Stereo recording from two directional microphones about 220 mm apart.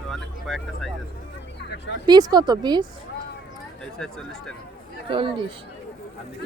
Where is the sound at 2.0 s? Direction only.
20° right (ahead or behind).